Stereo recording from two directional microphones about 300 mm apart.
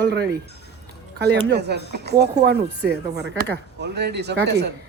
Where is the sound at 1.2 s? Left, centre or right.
Right.